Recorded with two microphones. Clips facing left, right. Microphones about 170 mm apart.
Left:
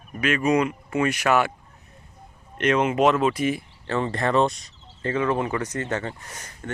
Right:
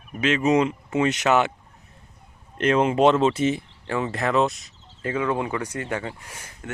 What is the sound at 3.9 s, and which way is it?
Speech, 5° right (ahead or behind).